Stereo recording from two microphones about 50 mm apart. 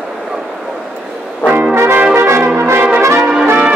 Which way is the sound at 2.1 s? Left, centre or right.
Right.